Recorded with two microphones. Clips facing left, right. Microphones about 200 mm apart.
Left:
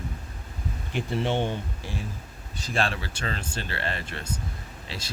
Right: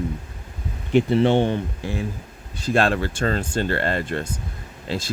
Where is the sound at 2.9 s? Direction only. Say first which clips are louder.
Right 10 dB; 50° right (ahead or behind).